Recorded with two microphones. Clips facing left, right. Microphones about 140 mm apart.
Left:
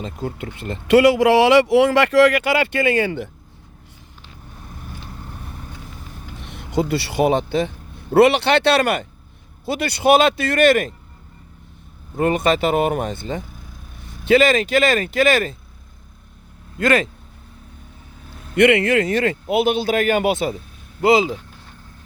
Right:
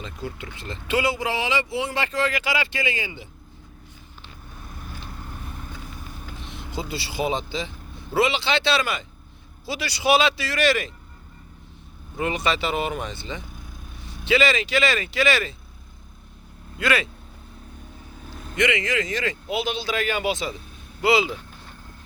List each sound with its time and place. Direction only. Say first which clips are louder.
0.0 s speech: left 6 dB; 45° left (ahead or behind); by 3.2 s 65° left (ahead or behind)
6.4 s speech: left 11 dB; 60° left (ahead or behind)
12.1 s speech: left 7 dB; 50° left (ahead or behind)
16.7 s speech: left 6 dB; 45° left (ahead or behind)
18.5 s speech: left 9 dB; 60° left (ahead or behind); by 21.3 s 45° left (ahead or behind)